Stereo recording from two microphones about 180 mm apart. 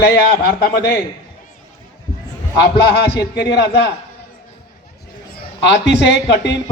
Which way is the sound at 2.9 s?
65° left (ahead or behind).